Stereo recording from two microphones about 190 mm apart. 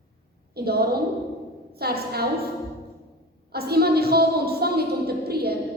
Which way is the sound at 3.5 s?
55° right (ahead or behind).